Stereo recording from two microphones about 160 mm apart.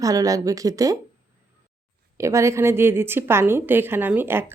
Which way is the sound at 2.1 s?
20° right (ahead or behind).